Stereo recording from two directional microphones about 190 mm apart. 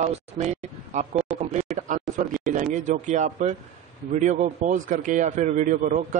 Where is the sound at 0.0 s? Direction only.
35° right (ahead or behind).